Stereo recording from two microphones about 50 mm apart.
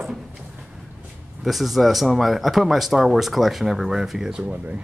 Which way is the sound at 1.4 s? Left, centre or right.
Centre.